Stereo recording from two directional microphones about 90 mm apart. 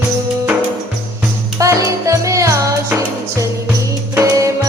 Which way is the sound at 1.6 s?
35° right (ahead or behind).